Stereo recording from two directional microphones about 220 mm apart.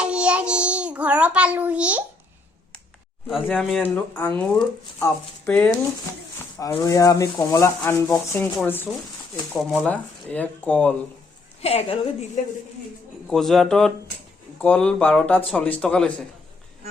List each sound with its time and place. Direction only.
0.0 s a child's voice: 5° right (ahead or behind)
3.2 s speech: centre (ahead or behind)
11.6 s a woman's voice: 25° left (ahead or behind)
13.3 s speech: centre (ahead or behind)